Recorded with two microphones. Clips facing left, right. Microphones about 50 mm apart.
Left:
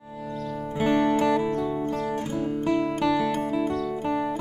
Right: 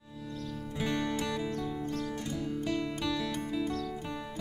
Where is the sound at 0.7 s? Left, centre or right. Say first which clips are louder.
Left 11 dB; left.